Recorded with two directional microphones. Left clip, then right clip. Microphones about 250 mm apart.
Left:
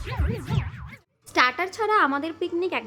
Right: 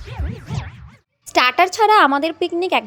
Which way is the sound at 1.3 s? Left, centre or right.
Right.